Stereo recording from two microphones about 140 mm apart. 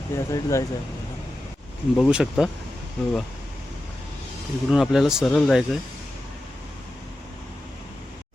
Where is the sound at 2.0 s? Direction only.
5° right (ahead or behind).